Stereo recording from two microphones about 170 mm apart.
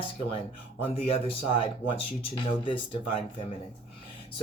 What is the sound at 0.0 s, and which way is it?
Speech, 30° left (ahead or behind).